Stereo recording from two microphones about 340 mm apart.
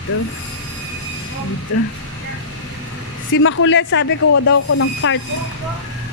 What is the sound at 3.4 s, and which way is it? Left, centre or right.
Speech, left.